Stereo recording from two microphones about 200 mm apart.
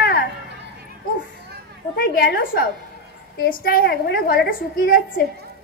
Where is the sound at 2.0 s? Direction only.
45° left (ahead or behind).